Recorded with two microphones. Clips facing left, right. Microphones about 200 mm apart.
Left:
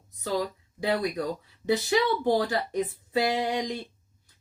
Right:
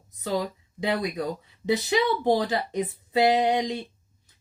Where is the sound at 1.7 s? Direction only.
20° right (ahead or behind).